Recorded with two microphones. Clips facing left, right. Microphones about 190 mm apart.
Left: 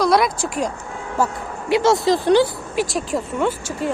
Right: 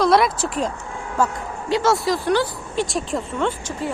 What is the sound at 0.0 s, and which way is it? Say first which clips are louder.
Speech: even; centre (ahead or behind).